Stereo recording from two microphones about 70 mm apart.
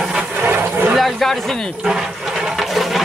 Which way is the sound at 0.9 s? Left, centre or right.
Centre.